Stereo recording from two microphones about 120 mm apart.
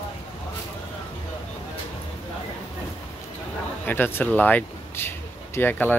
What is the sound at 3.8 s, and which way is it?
Speech, 15° left (ahead or behind).